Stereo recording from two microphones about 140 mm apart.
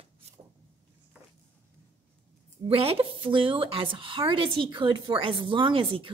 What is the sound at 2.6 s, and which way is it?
A woman's voice, 45° right (ahead or behind).